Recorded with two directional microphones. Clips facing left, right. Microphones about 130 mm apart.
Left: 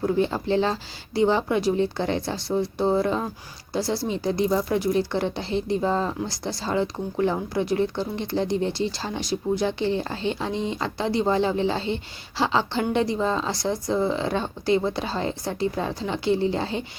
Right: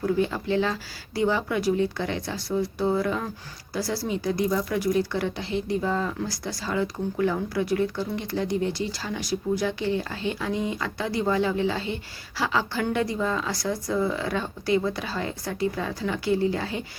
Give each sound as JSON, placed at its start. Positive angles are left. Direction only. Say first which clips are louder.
{"t": 0.0, "sound": "speech", "louder": "left 2 dB", "side_deg": 30}